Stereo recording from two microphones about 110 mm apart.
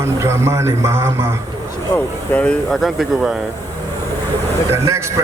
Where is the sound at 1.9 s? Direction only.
15° left (ahead or behind).